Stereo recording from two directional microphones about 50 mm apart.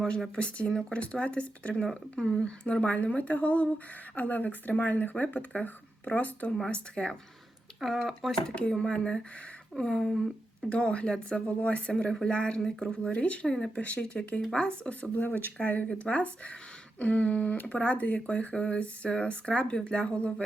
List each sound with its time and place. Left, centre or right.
0.3 s speech: left
6.7 s speech: left
7.9 s speech: centre
8.7 s speech: centre
13.7 s speech: left
15.1 s speech: left